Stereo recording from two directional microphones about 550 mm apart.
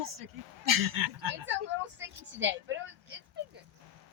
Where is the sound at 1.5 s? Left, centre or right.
Centre.